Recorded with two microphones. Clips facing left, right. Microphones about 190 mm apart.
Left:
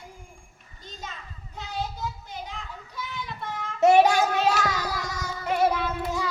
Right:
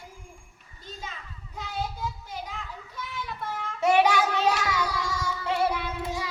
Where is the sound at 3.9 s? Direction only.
45° left (ahead or behind).